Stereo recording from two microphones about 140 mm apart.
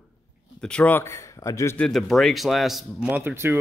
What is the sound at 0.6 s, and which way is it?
A man's voice, 10° left (ahead or behind).